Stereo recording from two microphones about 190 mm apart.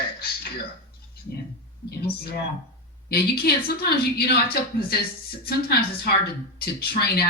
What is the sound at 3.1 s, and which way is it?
A man's voice, 55° left (ahead or behind).